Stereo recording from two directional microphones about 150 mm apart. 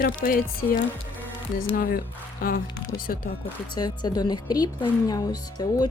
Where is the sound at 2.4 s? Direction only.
75° left (ahead or behind).